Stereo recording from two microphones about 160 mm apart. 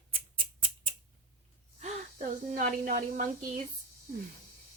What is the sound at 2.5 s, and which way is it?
Speech, 55° right (ahead or behind).